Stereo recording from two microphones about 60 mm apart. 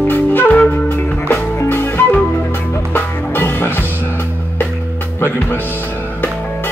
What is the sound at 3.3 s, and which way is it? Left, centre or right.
Music, left.